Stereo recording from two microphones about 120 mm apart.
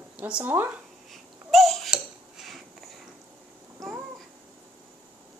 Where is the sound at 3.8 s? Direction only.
20° right (ahead or behind).